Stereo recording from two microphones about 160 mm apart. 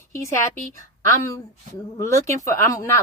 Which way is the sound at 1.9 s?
20° left (ahead or behind).